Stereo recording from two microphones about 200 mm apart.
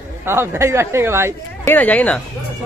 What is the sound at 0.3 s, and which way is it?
Speech, 10° right (ahead or behind).